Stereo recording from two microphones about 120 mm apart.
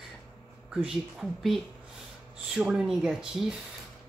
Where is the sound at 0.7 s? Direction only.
Centre (ahead or behind).